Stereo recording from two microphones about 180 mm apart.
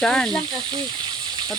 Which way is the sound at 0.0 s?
5° left (ahead or behind).